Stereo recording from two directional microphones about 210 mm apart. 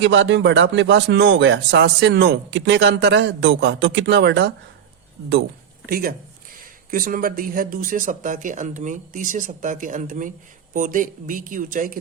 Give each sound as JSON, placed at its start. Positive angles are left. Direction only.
{"t": 0.0, "sound": "speech", "side_deg": -60}
{"t": 5.8, "sound": "speech", "side_deg": -45}